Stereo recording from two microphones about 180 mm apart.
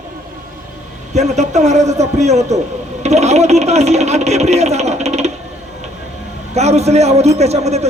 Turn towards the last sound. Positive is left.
turn(degrees=-35)  # may be behind; listen again after turning